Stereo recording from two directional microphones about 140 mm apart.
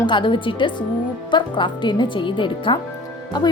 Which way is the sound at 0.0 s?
35° left (ahead or behind).